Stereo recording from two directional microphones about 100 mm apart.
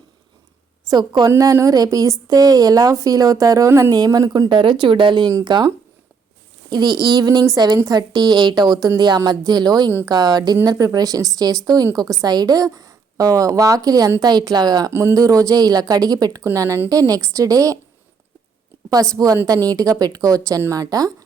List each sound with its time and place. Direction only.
0.9 s a woman's voice: 40° right (ahead or behind)
19.1 s a woman's voice: 35° right (ahead or behind)